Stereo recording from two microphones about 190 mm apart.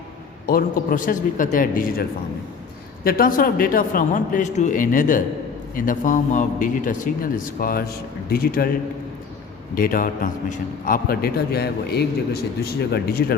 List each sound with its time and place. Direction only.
0.4 s a man's voice: 50° left (ahead or behind)
9.7 s a man's voice: 50° left (ahead or behind)